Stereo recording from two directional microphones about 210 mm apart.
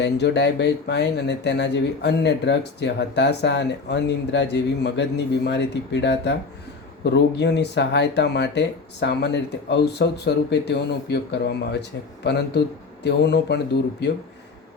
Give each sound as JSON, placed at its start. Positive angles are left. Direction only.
{"t": 0.0, "sound": "speech", "side_deg": 55}